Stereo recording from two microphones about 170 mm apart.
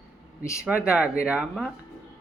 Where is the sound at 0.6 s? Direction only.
5° right (ahead or behind).